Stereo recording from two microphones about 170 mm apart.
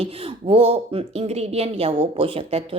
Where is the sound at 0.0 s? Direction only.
35° right (ahead or behind).